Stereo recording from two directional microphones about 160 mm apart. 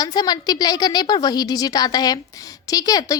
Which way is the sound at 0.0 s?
25° left (ahead or behind).